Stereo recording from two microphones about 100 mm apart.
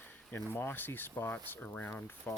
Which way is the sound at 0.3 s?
20° left (ahead or behind).